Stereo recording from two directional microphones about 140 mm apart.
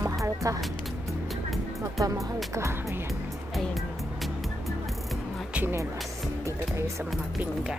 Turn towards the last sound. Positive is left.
turn(degrees=-15)  # may be behind; listen again after turning